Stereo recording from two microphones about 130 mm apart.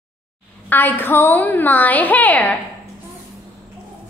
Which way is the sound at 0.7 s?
15° left (ahead or behind).